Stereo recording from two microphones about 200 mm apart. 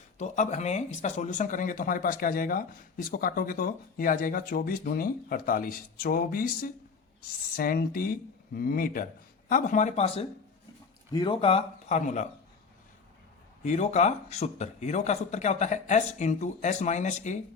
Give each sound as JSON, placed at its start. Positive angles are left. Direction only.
{"t": 0.2, "sound": "speech", "side_deg": 35}
{"t": 13.7, "sound": "speech", "side_deg": 35}